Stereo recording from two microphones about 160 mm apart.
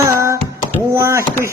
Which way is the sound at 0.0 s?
20° right (ahead or behind).